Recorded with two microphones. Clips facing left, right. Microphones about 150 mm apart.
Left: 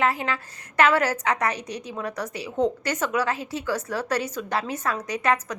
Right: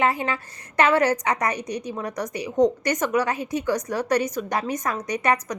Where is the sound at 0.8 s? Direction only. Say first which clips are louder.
Right 2 dB; 15° right (ahead or behind).